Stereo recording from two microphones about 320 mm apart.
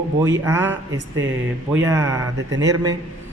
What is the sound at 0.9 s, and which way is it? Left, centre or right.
Speech, right.